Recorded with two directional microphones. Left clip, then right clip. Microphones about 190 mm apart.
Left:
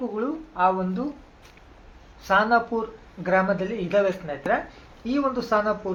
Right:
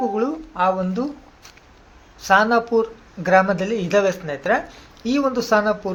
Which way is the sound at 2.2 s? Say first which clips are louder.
Right 4 dB; 40° right (ahead or behind).